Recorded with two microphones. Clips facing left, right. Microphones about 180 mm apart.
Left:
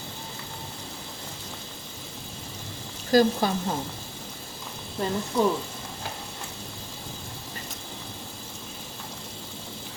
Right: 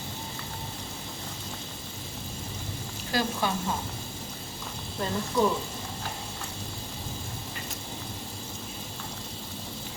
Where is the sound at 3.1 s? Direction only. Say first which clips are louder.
Left 10 dB; 40° left (ahead or behind).